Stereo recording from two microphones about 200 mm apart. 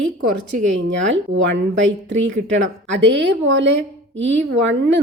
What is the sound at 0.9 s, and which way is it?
A woman's voice, 65° right (ahead or behind).